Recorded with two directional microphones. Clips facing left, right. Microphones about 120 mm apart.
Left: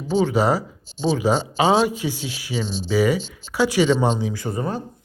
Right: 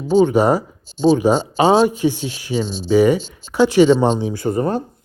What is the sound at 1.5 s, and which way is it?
Speech, 35° right (ahead or behind).